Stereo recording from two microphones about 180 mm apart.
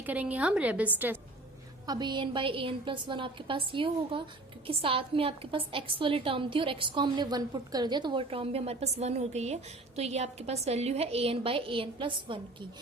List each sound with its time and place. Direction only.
0.0 s a woman's voice: 10° right (ahead or behind)
1.9 s a woman's voice: 25° right (ahead or behind)